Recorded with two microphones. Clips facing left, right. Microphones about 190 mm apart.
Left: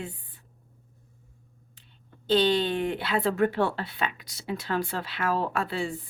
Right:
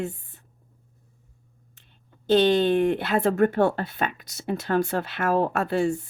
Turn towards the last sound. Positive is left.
turn(degrees=-50)  # may be behind; listen again after turning